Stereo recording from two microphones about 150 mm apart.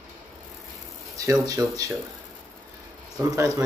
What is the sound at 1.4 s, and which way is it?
Speech, 25° right (ahead or behind).